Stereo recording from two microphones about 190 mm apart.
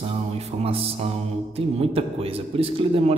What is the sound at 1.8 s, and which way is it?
A man's voice, 30° right (ahead or behind).